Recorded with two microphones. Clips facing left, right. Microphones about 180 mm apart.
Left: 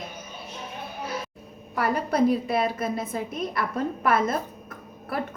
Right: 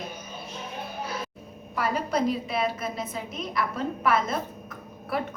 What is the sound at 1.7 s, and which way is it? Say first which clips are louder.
A woman's voice: left 2 dB; 55° left (ahead or behind).